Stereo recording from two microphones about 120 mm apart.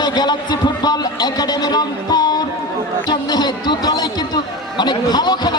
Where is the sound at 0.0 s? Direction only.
35° left (ahead or behind).